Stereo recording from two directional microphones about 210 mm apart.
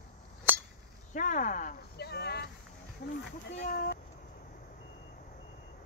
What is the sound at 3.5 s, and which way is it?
Speech, 50° left (ahead or behind).